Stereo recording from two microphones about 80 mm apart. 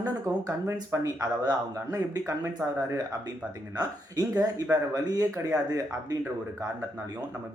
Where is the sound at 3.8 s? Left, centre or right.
Right.